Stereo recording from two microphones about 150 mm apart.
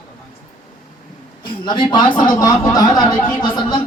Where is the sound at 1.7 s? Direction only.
30° left (ahead or behind).